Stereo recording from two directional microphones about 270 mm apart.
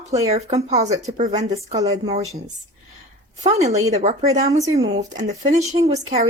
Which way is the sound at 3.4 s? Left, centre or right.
Right.